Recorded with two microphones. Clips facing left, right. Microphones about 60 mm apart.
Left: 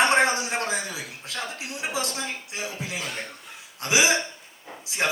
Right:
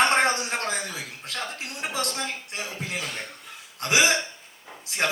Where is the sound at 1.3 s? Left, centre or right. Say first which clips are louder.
Even; right.